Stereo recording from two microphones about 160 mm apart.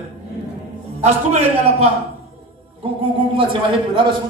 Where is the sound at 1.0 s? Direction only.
40° right (ahead or behind).